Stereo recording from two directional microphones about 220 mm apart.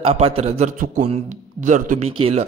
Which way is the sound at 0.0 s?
30° right (ahead or behind).